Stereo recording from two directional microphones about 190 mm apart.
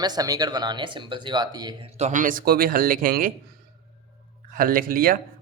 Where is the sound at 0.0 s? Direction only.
20° right (ahead or behind).